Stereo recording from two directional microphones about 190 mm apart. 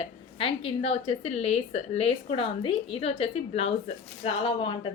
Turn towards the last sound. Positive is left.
turn(degrees=25)  # may be behind; listen again after turning